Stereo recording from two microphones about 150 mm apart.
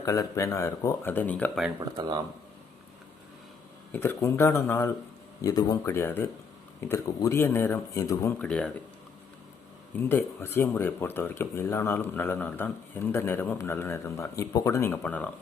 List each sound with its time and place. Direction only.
0.0 s speech: 20° left (ahead or behind)
1.8 s speech: 30° right (ahead or behind)
3.9 s speech: 15° left (ahead or behind)
8.4 s speech: 5° left (ahead or behind)
9.9 s speech: 15° left (ahead or behind)